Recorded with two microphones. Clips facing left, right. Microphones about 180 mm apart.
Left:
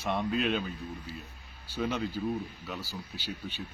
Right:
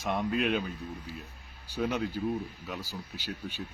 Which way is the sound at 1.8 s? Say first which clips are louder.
Right 1 dB; 5° right (ahead or behind).